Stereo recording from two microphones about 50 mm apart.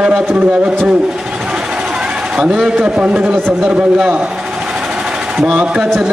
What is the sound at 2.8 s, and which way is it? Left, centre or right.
A man's voice, right.